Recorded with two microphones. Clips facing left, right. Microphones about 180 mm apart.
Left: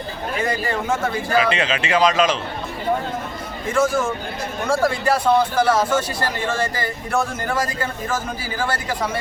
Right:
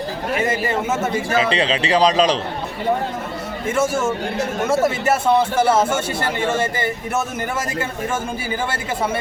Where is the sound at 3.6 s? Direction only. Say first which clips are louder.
Even; 25° right (ahead or behind).